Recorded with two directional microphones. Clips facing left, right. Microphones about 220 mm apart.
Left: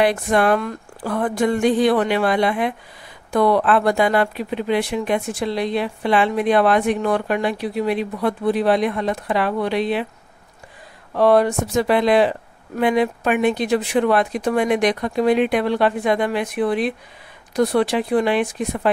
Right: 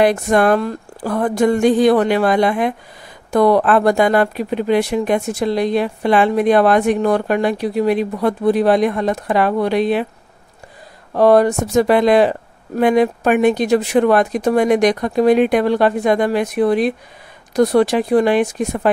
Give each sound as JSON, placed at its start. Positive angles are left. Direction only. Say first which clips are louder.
{"t": 0.0, "sound": "speech", "louder": "right 4 dB", "side_deg": -45}
{"t": 11.1, "sound": "speech", "louder": "right 4 dB", "side_deg": -40}